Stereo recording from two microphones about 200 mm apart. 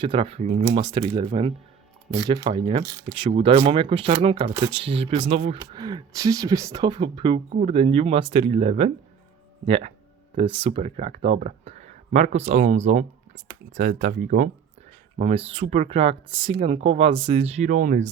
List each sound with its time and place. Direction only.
0.0 s speech: 25° right (ahead or behind)
5.8 s speech: 15° right (ahead or behind); by 14.5 s 40° right (ahead or behind)
15.2 s speech: 30° right (ahead or behind)